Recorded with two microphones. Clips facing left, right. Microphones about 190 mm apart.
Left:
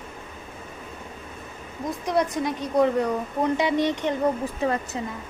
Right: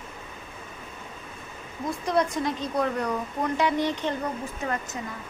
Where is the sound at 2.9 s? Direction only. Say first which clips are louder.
Left 4 dB; 25° left (ahead or behind).